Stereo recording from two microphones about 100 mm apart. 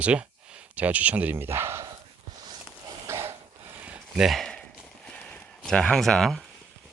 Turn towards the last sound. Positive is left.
turn(degrees=5)  # may be behind; listen again after turning